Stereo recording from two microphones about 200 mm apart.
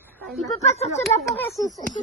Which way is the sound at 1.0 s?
Centre (ahead or behind).